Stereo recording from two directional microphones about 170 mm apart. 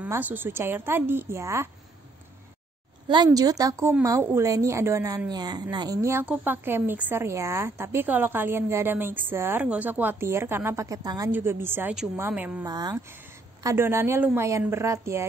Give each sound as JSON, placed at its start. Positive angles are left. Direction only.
{"t": 0.0, "sound": "a woman's voice", "side_deg": -10}
{"t": 3.3, "sound": "a woman's voice", "side_deg": -20}
{"t": 12.6, "sound": "a woman's voice", "side_deg": -25}